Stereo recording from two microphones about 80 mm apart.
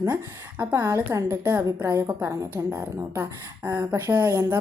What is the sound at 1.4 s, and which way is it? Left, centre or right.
Speech, right.